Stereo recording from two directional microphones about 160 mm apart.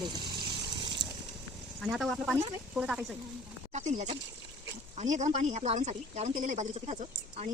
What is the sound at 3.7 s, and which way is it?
Speech, 45° right (ahead or behind).